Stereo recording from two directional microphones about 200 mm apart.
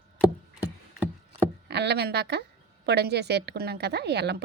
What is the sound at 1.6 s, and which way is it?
A woman's voice, 55° right (ahead or behind).